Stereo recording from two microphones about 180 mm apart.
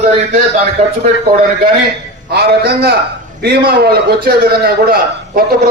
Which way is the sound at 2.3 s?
65° right (ahead or behind).